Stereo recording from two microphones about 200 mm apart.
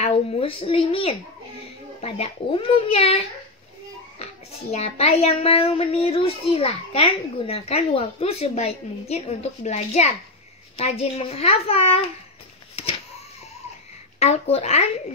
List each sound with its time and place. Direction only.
0.0 s a child's voice: 25° left (ahead or behind)
4.2 s a child's voice: 30° left (ahead or behind)
14.2 s a child's voice: 30° left (ahead or behind)